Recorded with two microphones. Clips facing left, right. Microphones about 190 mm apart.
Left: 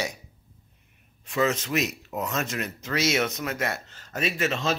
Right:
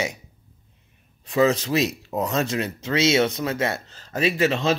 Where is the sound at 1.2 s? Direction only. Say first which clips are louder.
Right 6 dB; 35° right (ahead or behind).